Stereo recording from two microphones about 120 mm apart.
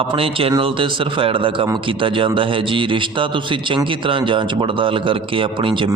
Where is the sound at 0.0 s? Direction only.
50° right (ahead or behind).